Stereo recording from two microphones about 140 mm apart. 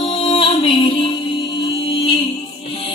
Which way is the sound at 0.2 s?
40° left (ahead or behind).